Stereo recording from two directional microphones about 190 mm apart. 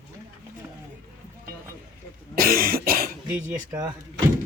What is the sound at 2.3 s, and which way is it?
Cough, 50° right (ahead or behind).